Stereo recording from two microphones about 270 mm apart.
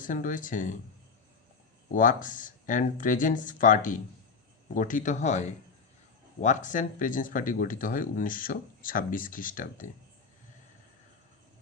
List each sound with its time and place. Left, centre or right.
0.0 s speech: left
1.9 s speech: left